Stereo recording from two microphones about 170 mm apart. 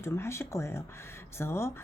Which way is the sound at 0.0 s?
15° left (ahead or behind).